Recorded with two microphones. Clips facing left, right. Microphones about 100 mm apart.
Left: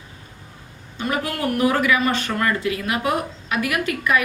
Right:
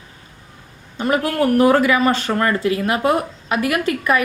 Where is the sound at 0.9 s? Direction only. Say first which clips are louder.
Right 6 dB; 35° right (ahead or behind).